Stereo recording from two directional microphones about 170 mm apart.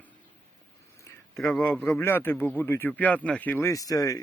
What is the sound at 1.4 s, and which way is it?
Speech, 5° left (ahead or behind).